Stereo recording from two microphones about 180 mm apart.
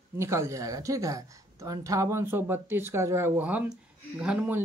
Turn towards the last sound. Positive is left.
turn(degrees=-5)  # may be behind; listen again after turning